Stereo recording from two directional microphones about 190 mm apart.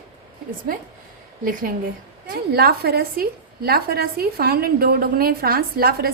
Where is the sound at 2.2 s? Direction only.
50° right (ahead or behind).